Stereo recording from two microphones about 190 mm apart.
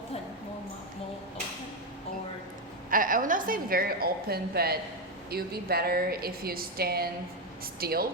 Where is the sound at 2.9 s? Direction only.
45° right (ahead or behind).